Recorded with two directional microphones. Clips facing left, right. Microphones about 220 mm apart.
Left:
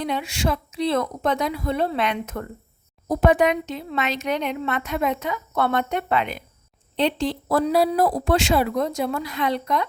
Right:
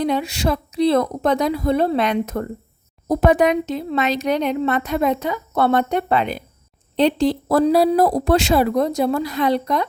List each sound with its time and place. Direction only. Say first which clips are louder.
0.0 s speech: right 5 dB; 35° right (ahead or behind)